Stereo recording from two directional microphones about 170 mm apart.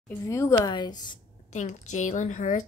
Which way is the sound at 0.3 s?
20° left (ahead or behind).